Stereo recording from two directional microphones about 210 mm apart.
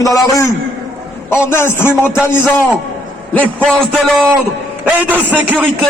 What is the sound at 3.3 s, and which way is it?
Speech, 5° left (ahead or behind).